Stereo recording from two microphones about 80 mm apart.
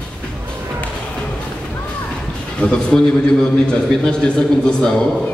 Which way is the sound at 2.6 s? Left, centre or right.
Centre.